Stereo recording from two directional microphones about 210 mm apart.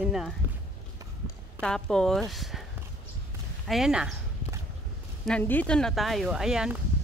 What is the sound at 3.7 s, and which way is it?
Speech, 5° right (ahead or behind).